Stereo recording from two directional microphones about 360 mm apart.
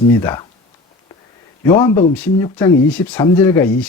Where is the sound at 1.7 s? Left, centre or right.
Centre.